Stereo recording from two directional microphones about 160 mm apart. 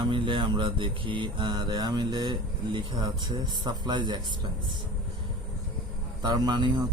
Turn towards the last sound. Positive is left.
turn(degrees=-25)  # may be behind; listen again after turning